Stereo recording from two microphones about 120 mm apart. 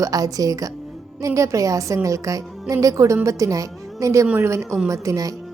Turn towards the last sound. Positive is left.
turn(degrees=-30)  # may be behind; listen again after turning